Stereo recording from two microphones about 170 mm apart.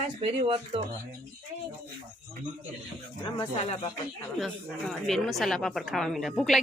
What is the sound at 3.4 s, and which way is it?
Speech, 35° left (ahead or behind).